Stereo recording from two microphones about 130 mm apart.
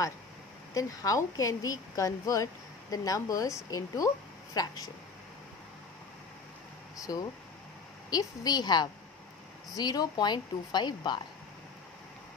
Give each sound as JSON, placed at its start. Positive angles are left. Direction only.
{"t": 0.7, "sound": "a woman's voice", "side_deg": 25}
{"t": 7.0, "sound": "a woman's voice", "side_deg": 25}